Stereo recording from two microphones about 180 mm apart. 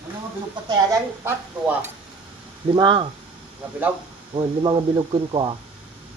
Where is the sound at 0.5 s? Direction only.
15° right (ahead or behind).